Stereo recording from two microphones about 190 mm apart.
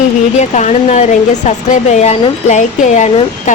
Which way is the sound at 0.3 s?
40° left (ahead or behind).